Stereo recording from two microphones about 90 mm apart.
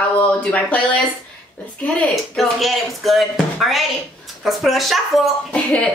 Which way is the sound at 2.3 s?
Centre (ahead or behind).